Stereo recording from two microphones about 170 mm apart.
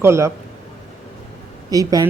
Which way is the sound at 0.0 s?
15° right (ahead or behind).